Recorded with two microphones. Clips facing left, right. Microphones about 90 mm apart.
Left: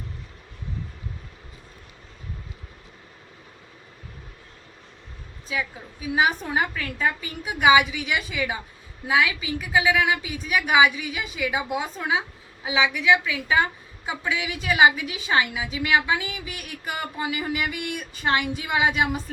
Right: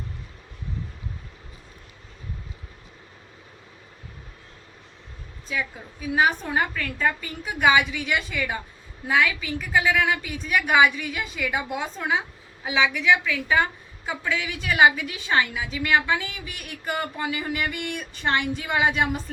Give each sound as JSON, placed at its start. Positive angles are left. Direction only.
{"t": 5.5, "sound": "a woman's voice", "side_deg": 5}